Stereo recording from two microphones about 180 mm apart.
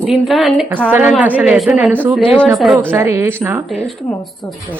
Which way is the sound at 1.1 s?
5° right (ahead or behind).